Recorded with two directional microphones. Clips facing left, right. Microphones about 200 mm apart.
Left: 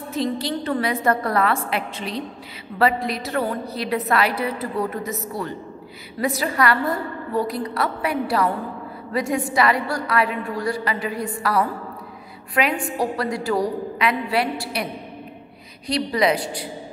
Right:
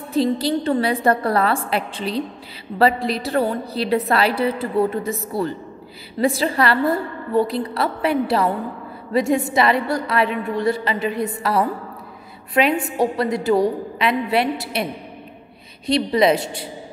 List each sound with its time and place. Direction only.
0.1 s a woman's voice: 30° right (ahead or behind)
15.9 s a woman's voice: 25° right (ahead or behind)